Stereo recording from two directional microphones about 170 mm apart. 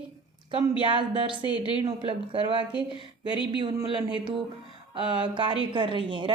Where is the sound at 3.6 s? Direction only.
25° right (ahead or behind).